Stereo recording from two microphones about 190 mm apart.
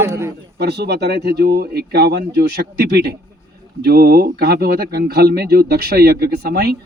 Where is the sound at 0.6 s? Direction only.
60° right (ahead or behind).